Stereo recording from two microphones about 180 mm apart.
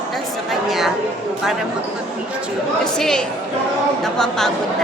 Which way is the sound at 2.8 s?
5° left (ahead or behind).